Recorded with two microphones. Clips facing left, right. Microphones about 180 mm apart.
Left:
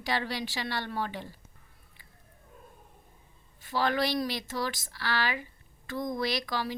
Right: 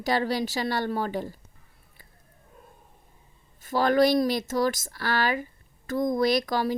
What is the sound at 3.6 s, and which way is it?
Speech, 45° right (ahead or behind).